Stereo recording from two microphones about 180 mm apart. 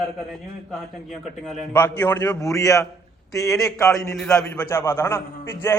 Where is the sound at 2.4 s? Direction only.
20° left (ahead or behind).